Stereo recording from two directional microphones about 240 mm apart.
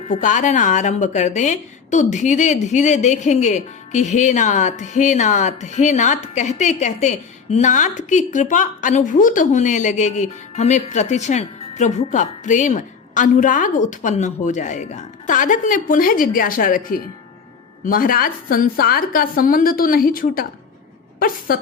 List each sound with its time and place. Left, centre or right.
0.1 s a woman's voice: left